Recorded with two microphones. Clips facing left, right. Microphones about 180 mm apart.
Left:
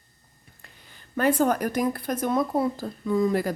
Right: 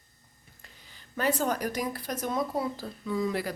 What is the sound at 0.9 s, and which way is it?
Speech, 55° left (ahead or behind).